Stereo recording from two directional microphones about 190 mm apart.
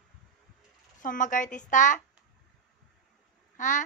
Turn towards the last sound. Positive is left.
turn(degrees=40)  # may be behind; listen again after turning